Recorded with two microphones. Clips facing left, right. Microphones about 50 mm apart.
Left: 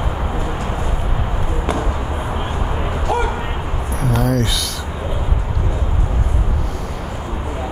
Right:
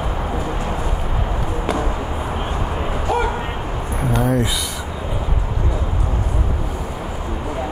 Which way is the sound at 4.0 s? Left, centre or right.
Centre.